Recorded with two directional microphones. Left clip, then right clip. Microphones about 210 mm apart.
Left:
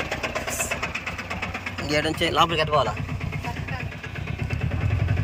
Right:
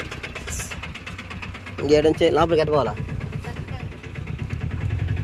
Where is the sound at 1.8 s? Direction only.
20° right (ahead or behind).